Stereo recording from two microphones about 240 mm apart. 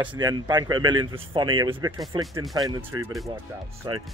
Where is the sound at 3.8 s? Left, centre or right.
Centre.